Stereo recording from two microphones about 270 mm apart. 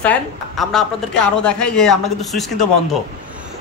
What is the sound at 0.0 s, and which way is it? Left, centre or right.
A man's voice, centre.